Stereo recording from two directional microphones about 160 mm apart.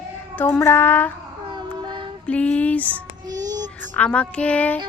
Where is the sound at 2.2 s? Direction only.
10° left (ahead or behind).